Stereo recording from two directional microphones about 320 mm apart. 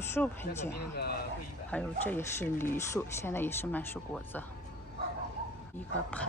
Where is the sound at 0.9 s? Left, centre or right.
Left.